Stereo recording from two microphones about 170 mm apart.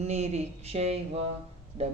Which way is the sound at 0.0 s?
40° right (ahead or behind).